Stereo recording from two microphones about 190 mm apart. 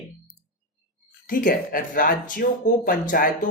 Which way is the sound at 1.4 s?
45° left (ahead or behind).